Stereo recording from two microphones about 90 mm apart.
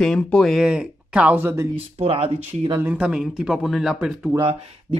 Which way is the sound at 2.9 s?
15° right (ahead or behind).